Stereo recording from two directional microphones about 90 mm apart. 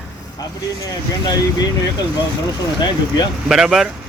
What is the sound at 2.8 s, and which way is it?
Speech, 55° left (ahead or behind).